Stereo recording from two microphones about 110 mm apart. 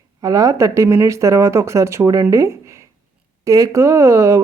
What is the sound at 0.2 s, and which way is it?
Speech, 30° right (ahead or behind).